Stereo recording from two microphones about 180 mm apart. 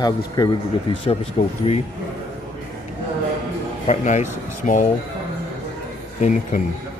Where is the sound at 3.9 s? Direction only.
40° left (ahead or behind).